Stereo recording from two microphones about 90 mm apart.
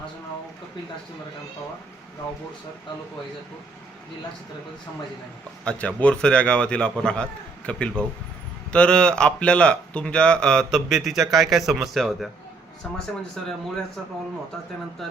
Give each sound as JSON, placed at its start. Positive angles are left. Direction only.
{"t": 5.6, "sound": "speech", "side_deg": 15}